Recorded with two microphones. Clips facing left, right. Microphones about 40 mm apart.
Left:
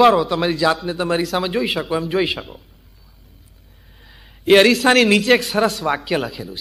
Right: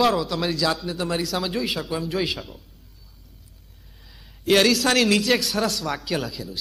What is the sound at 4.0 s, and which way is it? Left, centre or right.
A man's voice, left.